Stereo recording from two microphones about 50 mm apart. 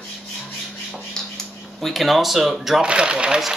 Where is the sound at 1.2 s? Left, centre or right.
Centre.